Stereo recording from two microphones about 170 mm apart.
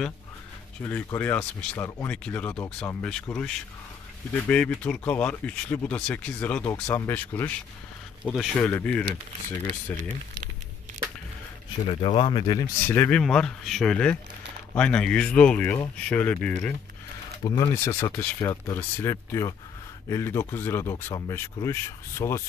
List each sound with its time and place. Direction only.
0.8 s speech: 10° left (ahead or behind)
8.2 s speech: 5° right (ahead or behind)
8.5 s speech: 10° left (ahead or behind)
11.9 s speech: 30° left (ahead or behind)
12.8 s speech: 10° left (ahead or behind)
17.4 s speech: 25° left (ahead or behind)